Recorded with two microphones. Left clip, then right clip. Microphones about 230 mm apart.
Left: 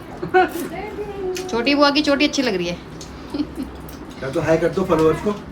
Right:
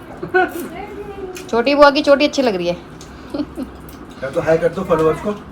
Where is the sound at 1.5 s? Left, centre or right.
Centre.